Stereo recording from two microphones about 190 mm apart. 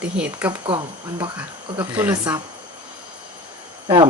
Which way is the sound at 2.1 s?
20° right (ahead or behind).